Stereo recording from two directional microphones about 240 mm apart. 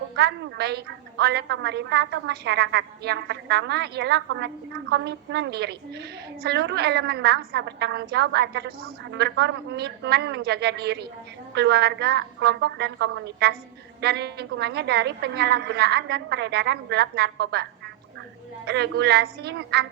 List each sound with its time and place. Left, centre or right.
0.2 s a woman's voice: right